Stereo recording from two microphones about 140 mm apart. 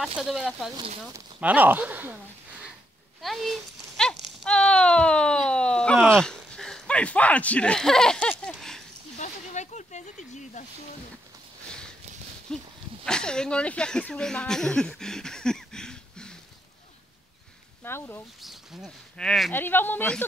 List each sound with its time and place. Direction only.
0.2 s speech: centre (ahead or behind)
3.2 s speech: centre (ahead or behind)
9.2 s snake: 55° left (ahead or behind)
12.5 s speech: 5° left (ahead or behind)
17.8 s speech: 15° left (ahead or behind)
18.4 s speech: centre (ahead or behind)
19.5 s speech: 15° left (ahead or behind)